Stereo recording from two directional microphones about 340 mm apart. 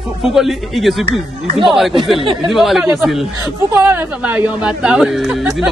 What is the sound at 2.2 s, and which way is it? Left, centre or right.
Speech, centre.